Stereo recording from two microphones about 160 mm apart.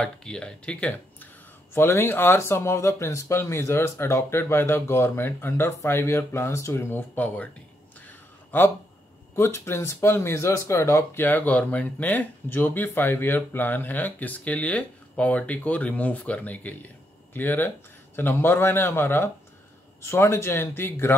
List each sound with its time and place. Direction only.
0.0 s speech: 5° left (ahead or behind)
8.5 s speech: 15° left (ahead or behind)